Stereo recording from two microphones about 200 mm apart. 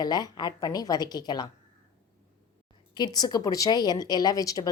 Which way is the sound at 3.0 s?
20° left (ahead or behind).